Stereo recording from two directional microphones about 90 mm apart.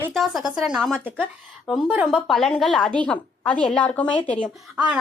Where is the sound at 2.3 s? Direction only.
5° left (ahead or behind).